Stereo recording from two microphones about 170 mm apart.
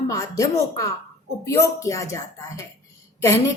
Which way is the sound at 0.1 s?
20° left (ahead or behind).